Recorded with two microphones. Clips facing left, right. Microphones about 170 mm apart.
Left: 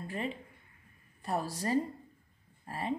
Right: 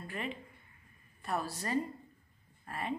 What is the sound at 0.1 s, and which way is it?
Speech, 35° left (ahead or behind).